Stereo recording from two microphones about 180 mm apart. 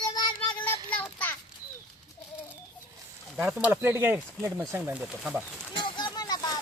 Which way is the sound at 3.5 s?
5° right (ahead or behind).